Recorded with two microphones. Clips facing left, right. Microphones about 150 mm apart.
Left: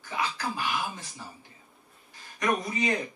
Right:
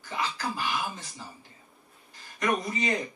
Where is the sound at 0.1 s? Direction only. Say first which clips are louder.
Even; 5° left (ahead or behind).